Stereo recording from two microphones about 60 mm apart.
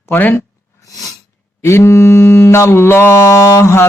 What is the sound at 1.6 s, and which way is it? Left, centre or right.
Mantra, left.